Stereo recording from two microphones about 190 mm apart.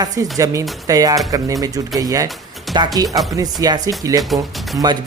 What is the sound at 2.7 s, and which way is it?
Music, centre (ahead or behind).